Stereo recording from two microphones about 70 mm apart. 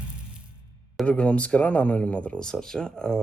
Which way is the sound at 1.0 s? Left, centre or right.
Centre.